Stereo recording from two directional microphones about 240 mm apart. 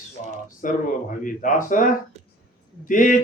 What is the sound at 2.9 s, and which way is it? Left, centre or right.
Speech, left.